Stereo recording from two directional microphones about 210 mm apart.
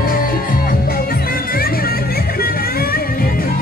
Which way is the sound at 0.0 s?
45° left (ahead or behind).